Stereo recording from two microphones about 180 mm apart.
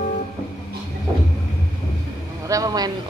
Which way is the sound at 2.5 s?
20° right (ahead or behind).